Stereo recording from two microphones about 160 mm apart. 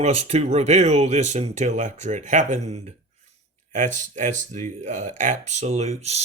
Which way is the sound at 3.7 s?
50° right (ahead or behind).